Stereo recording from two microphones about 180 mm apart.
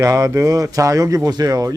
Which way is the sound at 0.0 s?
20° right (ahead or behind).